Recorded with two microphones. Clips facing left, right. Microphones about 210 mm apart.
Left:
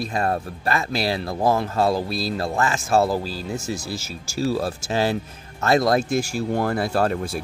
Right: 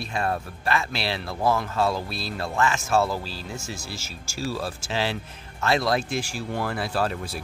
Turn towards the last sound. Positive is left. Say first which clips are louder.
# left 5 dB
turn(degrees=50)  # may be behind; listen again after turning